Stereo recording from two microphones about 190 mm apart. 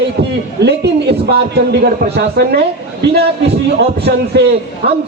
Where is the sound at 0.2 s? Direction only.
60° right (ahead or behind).